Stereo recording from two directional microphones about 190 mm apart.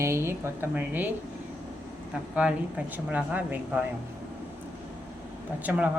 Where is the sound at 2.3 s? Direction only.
5° right (ahead or behind).